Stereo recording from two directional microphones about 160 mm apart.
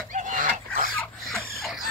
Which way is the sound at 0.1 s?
55° right (ahead or behind).